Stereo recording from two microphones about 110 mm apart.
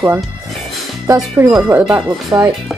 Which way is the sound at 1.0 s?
30° right (ahead or behind).